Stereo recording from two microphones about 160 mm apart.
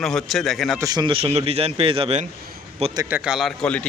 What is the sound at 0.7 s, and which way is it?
A man's voice, 25° right (ahead or behind).